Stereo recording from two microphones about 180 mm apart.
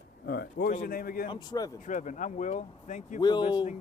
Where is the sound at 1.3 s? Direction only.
25° left (ahead or behind).